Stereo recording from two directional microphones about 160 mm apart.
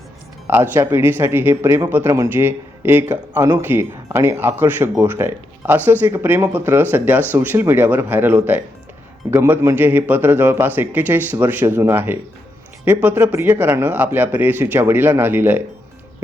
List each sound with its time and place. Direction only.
0.4 s speech: 15° right (ahead or behind)